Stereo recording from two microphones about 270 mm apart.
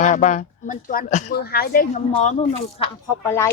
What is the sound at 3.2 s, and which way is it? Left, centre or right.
Speech, centre.